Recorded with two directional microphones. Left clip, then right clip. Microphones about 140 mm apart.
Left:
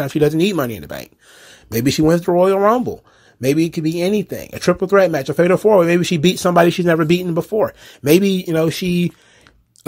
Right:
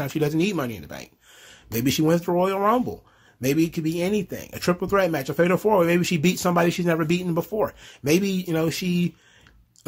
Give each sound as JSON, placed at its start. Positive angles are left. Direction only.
{"t": 0.0, "sound": "speech", "side_deg": 35}
{"t": 7.2, "sound": "speech", "side_deg": 25}